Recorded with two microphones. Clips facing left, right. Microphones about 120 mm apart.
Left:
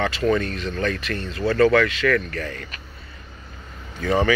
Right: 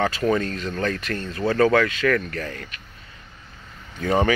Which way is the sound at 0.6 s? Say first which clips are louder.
Left 1 dB; 40° right (ahead or behind).